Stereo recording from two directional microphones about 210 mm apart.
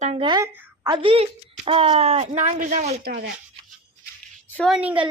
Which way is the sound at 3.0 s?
45° right (ahead or behind).